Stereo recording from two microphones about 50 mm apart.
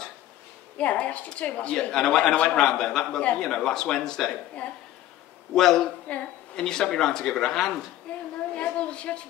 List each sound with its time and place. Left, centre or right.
0.7 s a woman's voice: left
1.8 s speech: centre
5.5 s speech: centre
6.1 s a woman's voice: left
6.5 s speech: centre
8.1 s a sound: left